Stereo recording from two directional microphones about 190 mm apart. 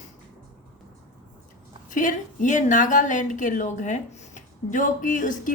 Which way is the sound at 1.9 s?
45° left (ahead or behind).